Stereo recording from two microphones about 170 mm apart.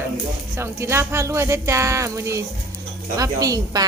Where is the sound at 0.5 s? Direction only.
15° right (ahead or behind).